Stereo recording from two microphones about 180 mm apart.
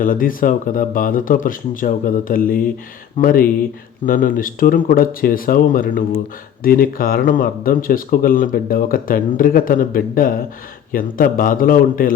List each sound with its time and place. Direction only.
0.0 s speech: 50° left (ahead or behind)